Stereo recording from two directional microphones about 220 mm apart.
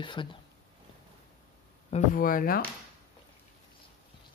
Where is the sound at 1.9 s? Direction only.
40° left (ahead or behind).